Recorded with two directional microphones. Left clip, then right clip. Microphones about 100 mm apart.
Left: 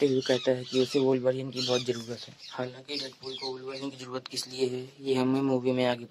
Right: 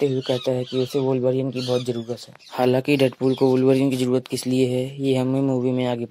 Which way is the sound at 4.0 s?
45° right (ahead or behind).